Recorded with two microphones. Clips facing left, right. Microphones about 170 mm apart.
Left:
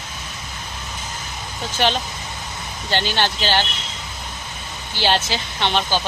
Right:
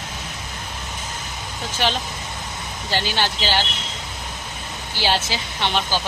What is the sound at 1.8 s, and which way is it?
Speech, centre (ahead or behind).